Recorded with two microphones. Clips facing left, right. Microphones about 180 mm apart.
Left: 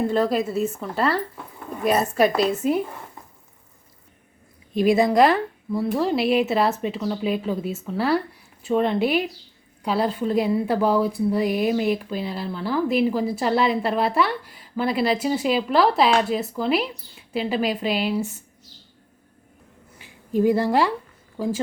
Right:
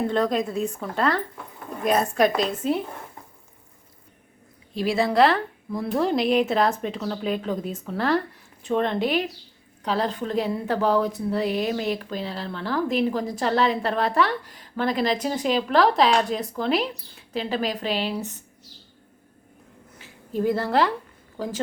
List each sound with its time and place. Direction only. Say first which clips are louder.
0.1 s speech: left 2 dB; 5° left (ahead or behind)
4.7 s speech: left 5 dB; 15° left (ahead or behind)
5.8 s speech: left 1 dB; centre (ahead or behind)
20.0 s speech: left 5 dB; 10° left (ahead or behind)